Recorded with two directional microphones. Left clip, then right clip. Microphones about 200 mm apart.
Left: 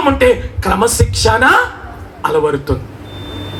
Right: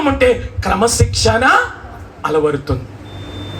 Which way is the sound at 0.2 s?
15° left (ahead or behind).